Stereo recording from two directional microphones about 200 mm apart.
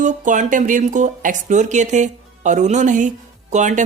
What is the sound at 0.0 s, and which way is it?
Speech, 40° right (ahead or behind).